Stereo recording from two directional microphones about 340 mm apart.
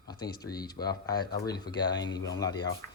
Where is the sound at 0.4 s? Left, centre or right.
Centre.